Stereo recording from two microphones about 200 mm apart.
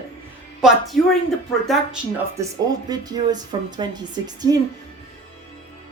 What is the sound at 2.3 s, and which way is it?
A woman's voice, 20° right (ahead or behind).